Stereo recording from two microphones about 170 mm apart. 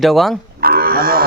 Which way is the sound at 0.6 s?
60° right (ahead or behind).